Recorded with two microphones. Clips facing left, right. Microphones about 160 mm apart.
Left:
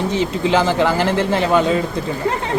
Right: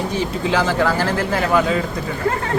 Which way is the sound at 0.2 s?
20° left (ahead or behind).